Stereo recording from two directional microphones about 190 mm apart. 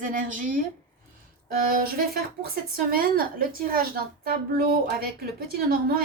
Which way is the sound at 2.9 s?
50° right (ahead or behind).